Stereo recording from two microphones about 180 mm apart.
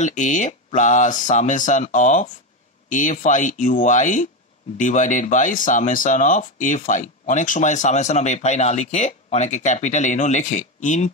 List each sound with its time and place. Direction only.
0.0 s speech: 40° left (ahead or behind)